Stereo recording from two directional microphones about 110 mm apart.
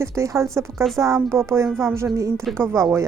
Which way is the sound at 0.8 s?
Centre (ahead or behind).